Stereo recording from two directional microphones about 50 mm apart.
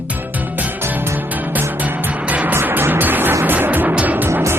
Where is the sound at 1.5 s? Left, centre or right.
Right.